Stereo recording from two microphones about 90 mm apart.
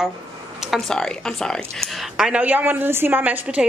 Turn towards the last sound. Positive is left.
turn(degrees=-15)  # may be behind; listen again after turning